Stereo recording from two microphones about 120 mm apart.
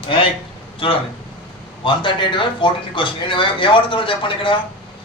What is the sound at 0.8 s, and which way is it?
Speech, 50° left (ahead or behind).